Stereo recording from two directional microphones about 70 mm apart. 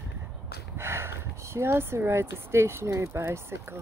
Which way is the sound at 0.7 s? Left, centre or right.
Right.